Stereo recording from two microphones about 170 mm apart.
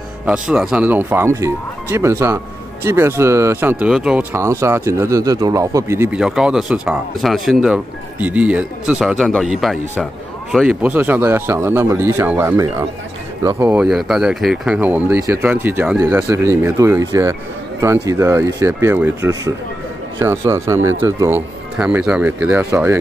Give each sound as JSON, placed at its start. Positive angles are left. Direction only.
{"t": 0.3, "sound": "speech", "side_deg": -5}
{"t": 6.1, "sound": "speech", "side_deg": -5}
{"t": 13.7, "sound": "speech", "side_deg": -5}